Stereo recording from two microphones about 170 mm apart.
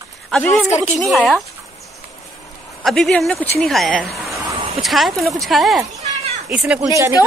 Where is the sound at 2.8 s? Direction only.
Centre (ahead or behind).